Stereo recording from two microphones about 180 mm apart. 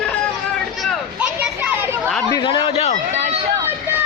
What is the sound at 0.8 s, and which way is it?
Children playing, 5° right (ahead or behind).